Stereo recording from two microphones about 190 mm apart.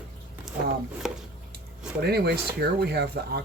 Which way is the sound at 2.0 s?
55° right (ahead or behind).